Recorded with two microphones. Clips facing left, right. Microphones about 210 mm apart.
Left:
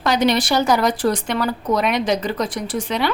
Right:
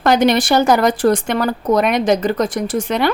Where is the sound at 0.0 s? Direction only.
50° right (ahead or behind).